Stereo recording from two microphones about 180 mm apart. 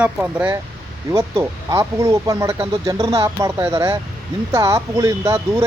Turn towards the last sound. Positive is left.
turn(degrees=-15)  # may be behind; listen again after turning